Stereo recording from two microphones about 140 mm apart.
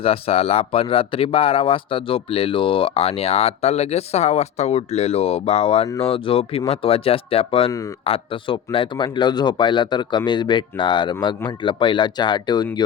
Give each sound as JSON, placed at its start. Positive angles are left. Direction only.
{"t": 0.0, "sound": "speech", "side_deg": 45}